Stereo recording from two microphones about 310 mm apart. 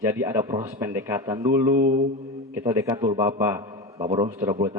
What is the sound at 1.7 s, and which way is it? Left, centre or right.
Mantra, right.